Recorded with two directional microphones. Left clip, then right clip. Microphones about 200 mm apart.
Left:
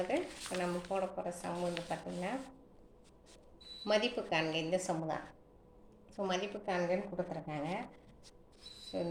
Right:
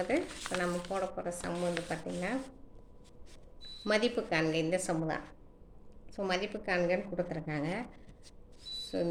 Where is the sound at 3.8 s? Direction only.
40° right (ahead or behind).